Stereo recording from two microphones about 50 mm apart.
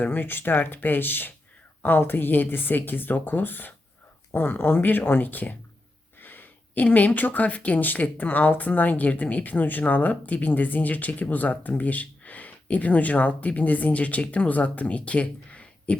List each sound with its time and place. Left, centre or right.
0.0 s speech: left
6.1 s a sound: left
6.8 s speech: left